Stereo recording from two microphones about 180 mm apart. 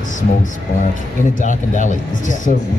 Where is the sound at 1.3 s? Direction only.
45° left (ahead or behind).